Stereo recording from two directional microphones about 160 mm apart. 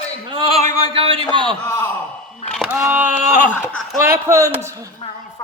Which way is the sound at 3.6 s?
10° left (ahead or behind).